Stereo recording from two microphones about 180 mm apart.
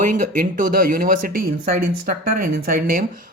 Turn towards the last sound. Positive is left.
turn(degrees=-50)  # may be behind; listen again after turning